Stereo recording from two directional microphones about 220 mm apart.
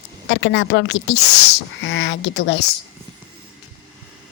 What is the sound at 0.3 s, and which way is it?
Speech, 55° left (ahead or behind).